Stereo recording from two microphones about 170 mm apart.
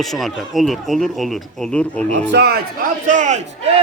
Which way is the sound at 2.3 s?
75° right (ahead or behind).